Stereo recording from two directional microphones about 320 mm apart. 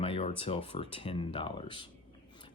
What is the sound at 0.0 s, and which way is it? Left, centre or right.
Speech, centre.